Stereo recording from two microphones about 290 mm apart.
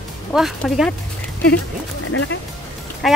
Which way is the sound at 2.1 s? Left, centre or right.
Left.